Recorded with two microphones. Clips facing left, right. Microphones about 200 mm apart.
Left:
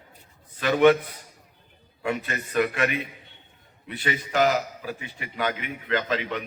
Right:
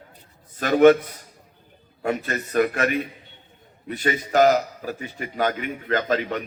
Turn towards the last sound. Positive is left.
turn(degrees=-45)  # may be behind; listen again after turning